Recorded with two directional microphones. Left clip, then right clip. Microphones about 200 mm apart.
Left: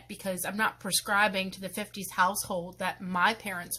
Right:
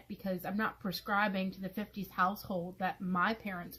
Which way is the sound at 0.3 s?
10° left (ahead or behind).